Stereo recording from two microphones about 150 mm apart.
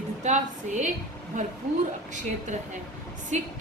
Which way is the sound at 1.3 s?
55° right (ahead or behind).